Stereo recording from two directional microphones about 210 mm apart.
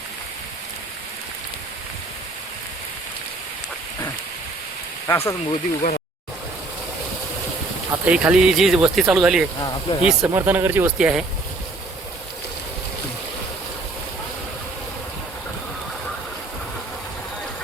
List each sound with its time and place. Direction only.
5.0 s speech: 10° left (ahead or behind)
5.5 s speech: 30° left (ahead or behind)
8.0 s speech: 5° right (ahead or behind)